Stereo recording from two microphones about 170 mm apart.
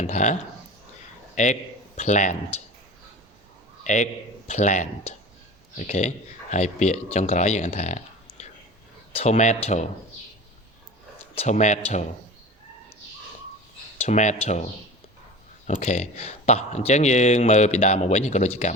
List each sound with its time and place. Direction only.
0.0 s speech: 45° left (ahead or behind)
1.4 s speech: 45° left (ahead or behind)
3.8 s speech: 45° left (ahead or behind)
11.3 s speech: 45° left (ahead or behind)
14.0 s speech: 45° left (ahead or behind)